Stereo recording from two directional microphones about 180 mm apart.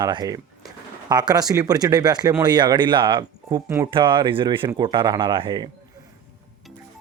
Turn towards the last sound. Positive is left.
turn(degrees=-25)  # may be behind; listen again after turning